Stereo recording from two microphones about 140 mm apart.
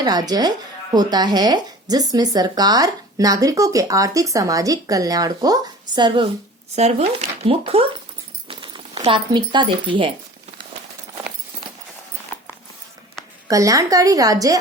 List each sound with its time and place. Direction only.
0.0 s speech: 30° right (ahead or behind)
6.7 s speech: 50° right (ahead or behind)
13.5 s speech: 25° right (ahead or behind)